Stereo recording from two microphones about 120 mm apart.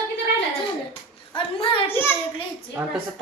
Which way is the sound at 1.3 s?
50° left (ahead or behind).